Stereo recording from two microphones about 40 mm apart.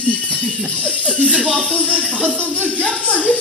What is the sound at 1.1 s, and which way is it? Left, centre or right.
Speech, right.